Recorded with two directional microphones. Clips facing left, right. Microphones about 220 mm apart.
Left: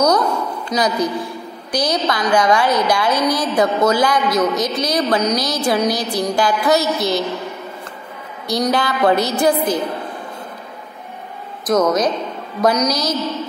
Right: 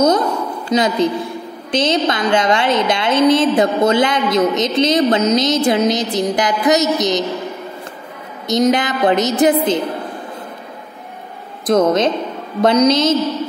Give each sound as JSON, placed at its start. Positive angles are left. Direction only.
{"t": 0.7, "sound": "a woman's voice", "side_deg": -25}
{"t": 8.5, "sound": "a woman's voice", "side_deg": -20}
{"t": 11.6, "sound": "a woman's voice", "side_deg": -25}